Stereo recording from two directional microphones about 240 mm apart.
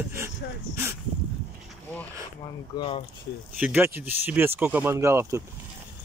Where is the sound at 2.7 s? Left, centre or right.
Left.